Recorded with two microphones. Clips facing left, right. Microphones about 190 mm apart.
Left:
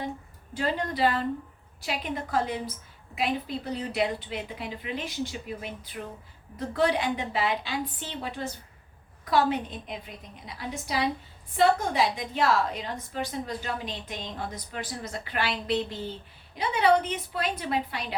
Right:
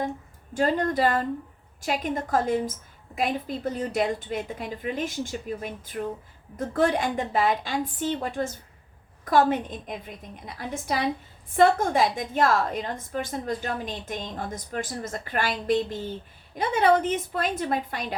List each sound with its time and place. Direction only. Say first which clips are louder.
0.5 s a woman's voice: right 6 dB; 45° right (ahead or behind)